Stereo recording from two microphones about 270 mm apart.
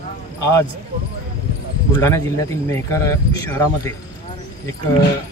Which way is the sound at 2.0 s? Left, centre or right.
Centre.